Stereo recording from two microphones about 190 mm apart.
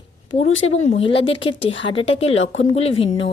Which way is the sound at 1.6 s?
75° left (ahead or behind).